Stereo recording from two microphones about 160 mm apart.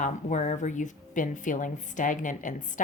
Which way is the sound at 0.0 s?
50° left (ahead or behind).